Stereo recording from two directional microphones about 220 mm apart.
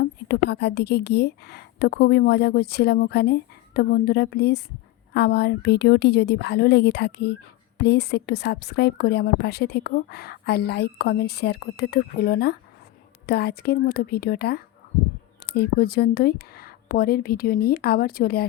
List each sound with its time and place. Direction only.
0.0 s a woman's voice: 45° left (ahead or behind)